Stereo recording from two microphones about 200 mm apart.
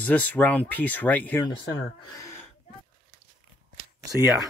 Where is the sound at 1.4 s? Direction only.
25° left (ahead or behind).